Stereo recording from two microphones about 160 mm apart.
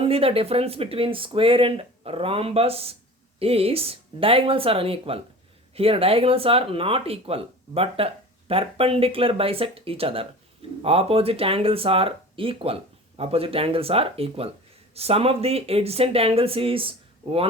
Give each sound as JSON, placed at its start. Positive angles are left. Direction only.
{"t": 0.0, "sound": "speech", "side_deg": -35}